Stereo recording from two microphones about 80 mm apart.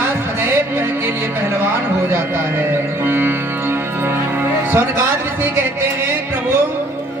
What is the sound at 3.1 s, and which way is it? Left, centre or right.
Music, right.